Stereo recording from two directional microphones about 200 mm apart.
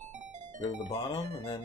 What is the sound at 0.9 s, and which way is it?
Speech, 25° left (ahead or behind).